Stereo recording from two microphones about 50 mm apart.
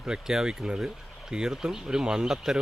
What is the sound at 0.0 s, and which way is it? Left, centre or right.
Speech, centre.